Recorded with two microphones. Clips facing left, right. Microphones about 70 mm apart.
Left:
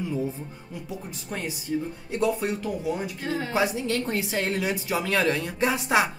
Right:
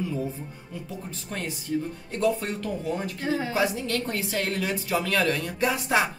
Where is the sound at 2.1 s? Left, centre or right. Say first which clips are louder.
Even; centre.